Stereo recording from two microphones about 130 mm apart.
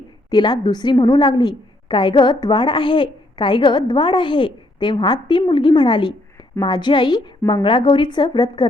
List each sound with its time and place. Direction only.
0.3 s a woman's voice: 35° left (ahead or behind)